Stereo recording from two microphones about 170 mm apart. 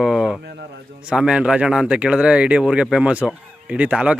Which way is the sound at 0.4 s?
75° right (ahead or behind).